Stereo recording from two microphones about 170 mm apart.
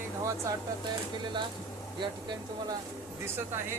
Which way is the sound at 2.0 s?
25° right (ahead or behind).